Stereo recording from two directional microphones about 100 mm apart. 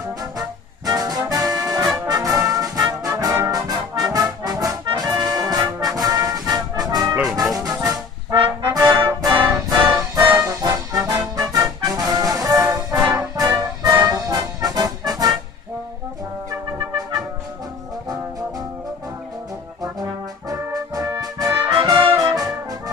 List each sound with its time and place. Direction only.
0.4 s music: 40° right (ahead or behind)
2.0 s brass instrument: 40° right (ahead or behind)
8.9 s music: 45° right (ahead or behind)
19.8 s brass instrument: 35° right (ahead or behind)
22.1 s brass instrument: 40° right (ahead or behind)